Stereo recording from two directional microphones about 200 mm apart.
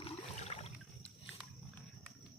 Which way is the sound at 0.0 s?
30° left (ahead or behind).